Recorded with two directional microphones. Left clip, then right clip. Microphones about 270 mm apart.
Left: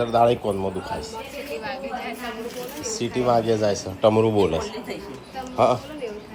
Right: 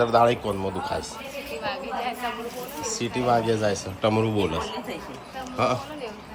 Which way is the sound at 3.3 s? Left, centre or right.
Centre.